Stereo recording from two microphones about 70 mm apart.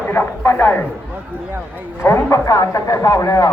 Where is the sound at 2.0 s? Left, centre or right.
Left.